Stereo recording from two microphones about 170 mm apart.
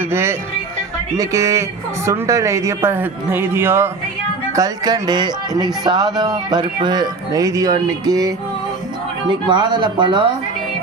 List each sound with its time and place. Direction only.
0.0 s music: 15° right (ahead or behind)
1.1 s speech: 20° right (ahead or behind)
9.3 s speech: 25° right (ahead or behind)